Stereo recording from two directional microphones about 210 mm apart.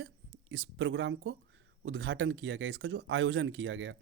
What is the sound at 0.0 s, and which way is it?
Speech, 65° right (ahead or behind).